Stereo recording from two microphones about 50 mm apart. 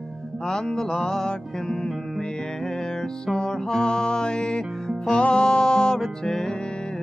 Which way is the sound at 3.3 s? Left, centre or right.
Centre.